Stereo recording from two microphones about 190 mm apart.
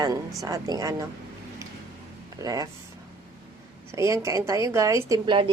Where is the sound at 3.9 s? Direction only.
15° right (ahead or behind).